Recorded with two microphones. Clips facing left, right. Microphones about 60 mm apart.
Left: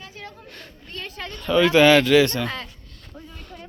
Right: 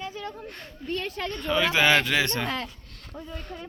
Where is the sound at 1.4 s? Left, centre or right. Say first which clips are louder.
Left 7 dB; centre.